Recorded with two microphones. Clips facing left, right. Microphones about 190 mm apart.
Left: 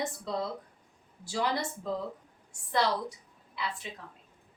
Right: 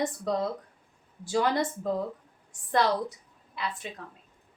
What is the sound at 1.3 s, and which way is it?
Speech, 50° right (ahead or behind).